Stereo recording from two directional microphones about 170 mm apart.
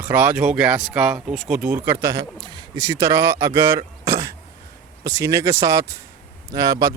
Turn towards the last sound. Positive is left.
turn(degrees=-20)  # may be behind; listen again after turning